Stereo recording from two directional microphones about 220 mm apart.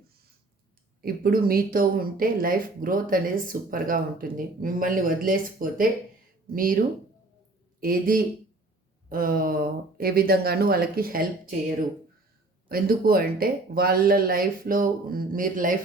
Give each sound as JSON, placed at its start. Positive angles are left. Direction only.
{"t": 1.0, "sound": "a man's voice", "side_deg": -40}
{"t": 12.6, "sound": "speech", "side_deg": -40}